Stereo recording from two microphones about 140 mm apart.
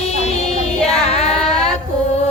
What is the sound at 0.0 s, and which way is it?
Child singing, 50° left (ahead or behind).